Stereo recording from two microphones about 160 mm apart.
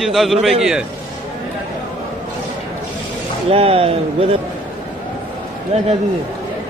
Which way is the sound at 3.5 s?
40° right (ahead or behind).